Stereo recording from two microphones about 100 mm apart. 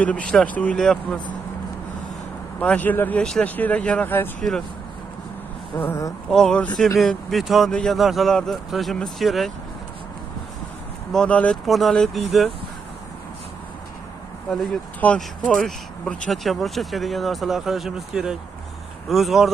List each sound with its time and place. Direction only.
0.0 s speech: 10° left (ahead or behind)
2.6 s speech: 15° left (ahead or behind)
5.8 s speech: 25° left (ahead or behind)
6.3 s speech: 5° left (ahead or behind)
11.1 s speech: 10° left (ahead or behind)
11.6 s speech: centre (ahead or behind)
14.5 s speech: 5° left (ahead or behind)